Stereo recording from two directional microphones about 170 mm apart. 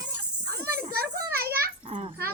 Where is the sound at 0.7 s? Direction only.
65° right (ahead or behind).